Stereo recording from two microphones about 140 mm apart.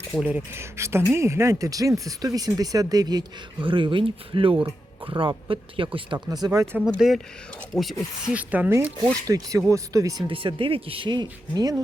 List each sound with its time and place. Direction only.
0.2 s speech: 10° right (ahead or behind)
6.7 s speech: 5° right (ahead or behind)
8.4 s speech: 10° right (ahead or behind)
9.0 s speech: 25° right (ahead or behind)
10.2 s speech: 40° right (ahead or behind)